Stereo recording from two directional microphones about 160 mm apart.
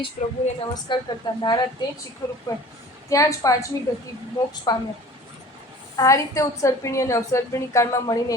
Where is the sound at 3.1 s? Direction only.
20° left (ahead or behind).